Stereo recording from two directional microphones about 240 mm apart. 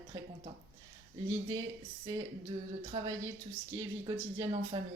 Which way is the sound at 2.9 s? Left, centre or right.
Centre.